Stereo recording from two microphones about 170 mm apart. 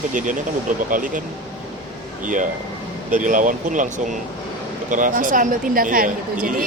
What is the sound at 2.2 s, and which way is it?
A woman's voice, 50° right (ahead or behind).